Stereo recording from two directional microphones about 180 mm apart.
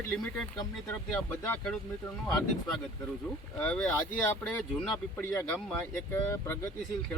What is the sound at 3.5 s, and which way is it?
Speech, 5° left (ahead or behind).